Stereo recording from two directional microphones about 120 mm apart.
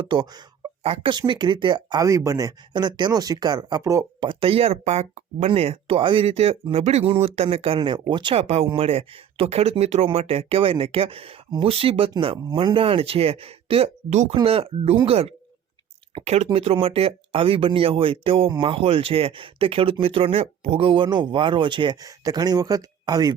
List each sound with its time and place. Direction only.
0.8 s speech: 55° right (ahead or behind)
1.3 s speech: 40° right (ahead or behind)
2.0 s speech: 25° right (ahead or behind)
4.2 s speech: 45° right (ahead or behind); by 5.5 s 65° right (ahead or behind)
5.5 s speech: 55° right (ahead or behind)
7.8 s speech: 40° right (ahead or behind)
8.4 s speech: 60° right (ahead or behind); by 23.3 s 35° right (ahead or behind)